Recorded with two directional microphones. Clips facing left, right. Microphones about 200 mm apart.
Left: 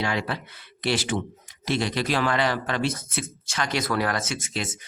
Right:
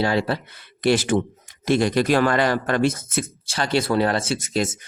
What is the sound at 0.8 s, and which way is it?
Speech, 50° right (ahead or behind).